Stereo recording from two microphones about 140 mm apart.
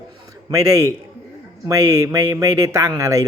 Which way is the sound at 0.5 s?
25° right (ahead or behind).